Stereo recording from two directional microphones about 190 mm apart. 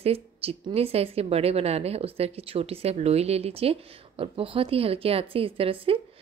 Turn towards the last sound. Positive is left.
turn(degrees=-30)  # may be behind; listen again after turning